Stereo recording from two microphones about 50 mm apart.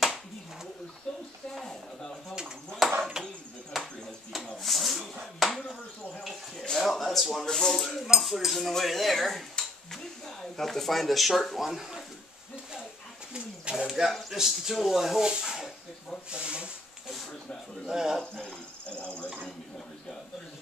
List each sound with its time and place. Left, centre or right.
1.5 s a sound: centre
3.0 s chop: centre
3.7 s a sound: centre
6.8 s a sound: centre
7.4 s speech: centre
13.7 s speech: centre
16.3 s speech: right
17.8 s speech: centre
18.9 s speech: left